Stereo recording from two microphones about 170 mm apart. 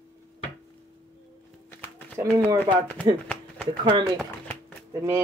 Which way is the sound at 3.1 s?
30° right (ahead or behind).